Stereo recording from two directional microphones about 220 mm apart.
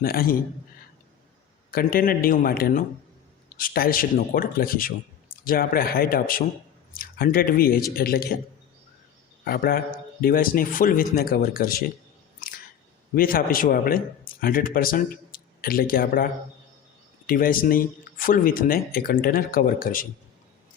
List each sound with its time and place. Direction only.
0.0 s a man's voice: 40° left (ahead or behind)
1.7 s a man's voice: 40° left (ahead or behind)
9.4 s a man's voice: 45° left (ahead or behind)
13.1 s speech: 40° left (ahead or behind)